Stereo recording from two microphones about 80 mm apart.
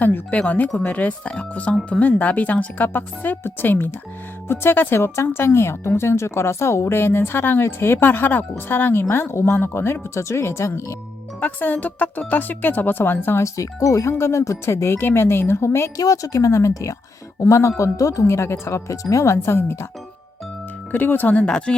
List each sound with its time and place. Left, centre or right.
0.0 s speech: left
11.3 s speech: left
13.4 s speech: left
16.0 s speech: left
20.9 s speech: left
21.4 s speech: centre